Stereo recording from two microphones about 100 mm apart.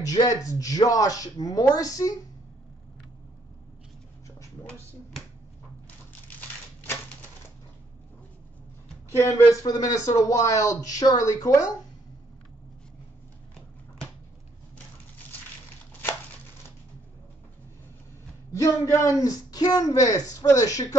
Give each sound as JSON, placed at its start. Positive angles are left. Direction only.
{"t": 0.0, "sound": "speech", "side_deg": 35}
{"t": 6.2, "sound": "crushing", "side_deg": 20}
{"t": 9.1, "sound": "speech", "side_deg": 30}
{"t": 18.5, "sound": "speech", "side_deg": 30}